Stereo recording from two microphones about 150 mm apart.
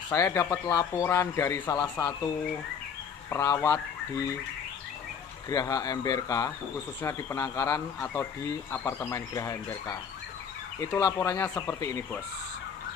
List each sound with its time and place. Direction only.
0.1 s speech: 20° left (ahead or behind)
3.3 s speech: 20° left (ahead or behind)
5.5 s speech: 25° left (ahead or behind)